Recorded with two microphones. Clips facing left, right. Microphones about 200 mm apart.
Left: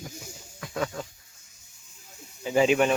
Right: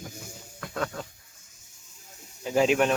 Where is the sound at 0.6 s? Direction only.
5° left (ahead or behind).